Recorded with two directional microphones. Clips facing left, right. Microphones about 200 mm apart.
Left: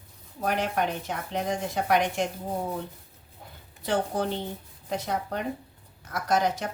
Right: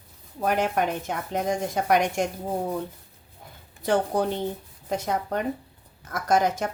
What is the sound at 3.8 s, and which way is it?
A woman's voice, 45° right (ahead or behind).